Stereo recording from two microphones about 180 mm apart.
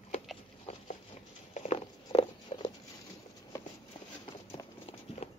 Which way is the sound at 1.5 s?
40° left (ahead or behind).